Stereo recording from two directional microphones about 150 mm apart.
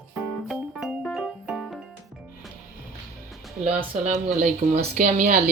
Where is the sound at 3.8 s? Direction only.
55° right (ahead or behind).